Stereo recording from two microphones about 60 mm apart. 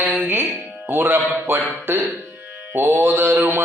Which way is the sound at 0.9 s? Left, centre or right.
Right.